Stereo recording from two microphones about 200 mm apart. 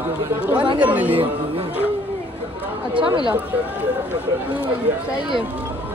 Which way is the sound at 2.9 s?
25° right (ahead or behind).